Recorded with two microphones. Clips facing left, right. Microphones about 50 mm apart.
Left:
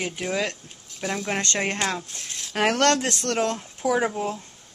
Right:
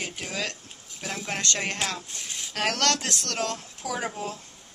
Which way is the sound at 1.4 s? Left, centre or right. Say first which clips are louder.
Left 3 dB; left.